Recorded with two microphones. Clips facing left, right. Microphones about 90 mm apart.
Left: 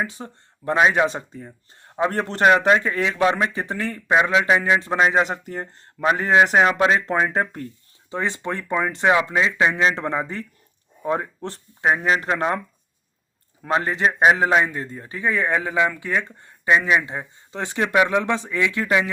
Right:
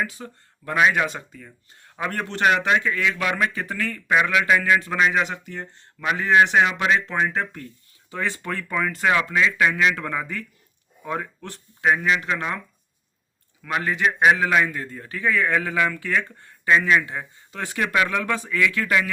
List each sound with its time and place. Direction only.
0.0 s speech: 30° left (ahead or behind)
8.1 s a man's voice: 25° left (ahead or behind)